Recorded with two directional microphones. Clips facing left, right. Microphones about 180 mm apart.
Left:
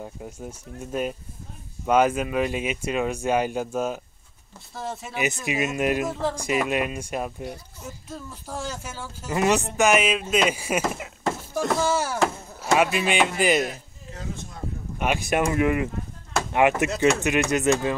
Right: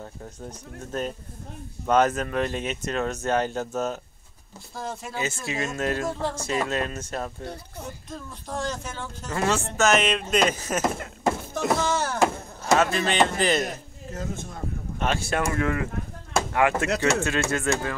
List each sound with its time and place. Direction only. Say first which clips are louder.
0.0 s speech: left 2 dB; 10° left (ahead or behind)
5.1 s speech: left 5 dB; 15° left (ahead or behind)
15.0 s speech: left 3 dB; 15° left (ahead or behind)